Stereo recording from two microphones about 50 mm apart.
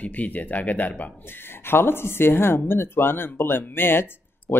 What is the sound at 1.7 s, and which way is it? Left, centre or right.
Speech, left.